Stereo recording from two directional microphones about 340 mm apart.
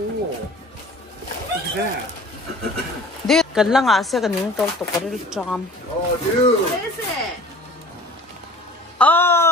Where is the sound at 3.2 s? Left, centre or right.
Centre.